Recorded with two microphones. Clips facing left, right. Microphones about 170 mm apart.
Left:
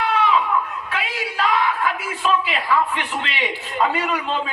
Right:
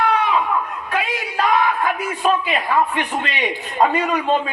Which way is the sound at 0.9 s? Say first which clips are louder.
Right 4 dB; 45° right (ahead or behind).